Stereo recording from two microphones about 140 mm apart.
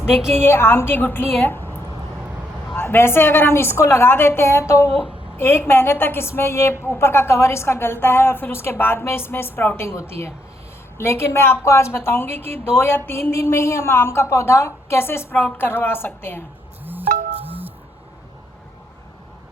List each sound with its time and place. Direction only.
0.1 s a woman's voice: 5° right (ahead or behind)
0.3 s a woman's voice: 15° left (ahead or behind)
2.7 s a woman's voice: 15° left (ahead or behind)
16.8 s music: 10° right (ahead or behind)